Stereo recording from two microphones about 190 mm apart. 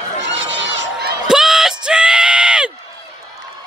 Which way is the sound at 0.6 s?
65° right (ahead or behind).